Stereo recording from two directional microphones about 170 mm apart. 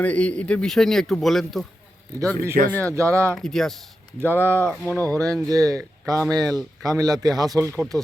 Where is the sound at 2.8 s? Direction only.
15° right (ahead or behind).